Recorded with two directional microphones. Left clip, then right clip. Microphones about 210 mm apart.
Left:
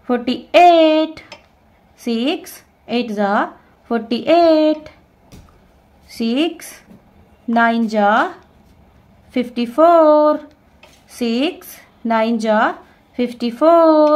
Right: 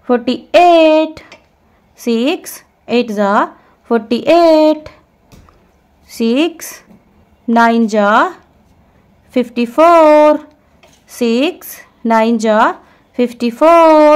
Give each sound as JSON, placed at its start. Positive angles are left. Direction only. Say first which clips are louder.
{"t": 0.0, "sound": "speech", "louder": "right 5 dB", "side_deg": -30}
{"t": 6.0, "sound": "a woman's voice", "louder": "right 5 dB", "side_deg": -35}
{"t": 9.3, "sound": "a woman's voice", "louder": "right 6 dB", "side_deg": -35}